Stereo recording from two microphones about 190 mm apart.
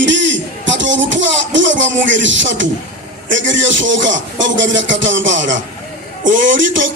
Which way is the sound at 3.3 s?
80° right.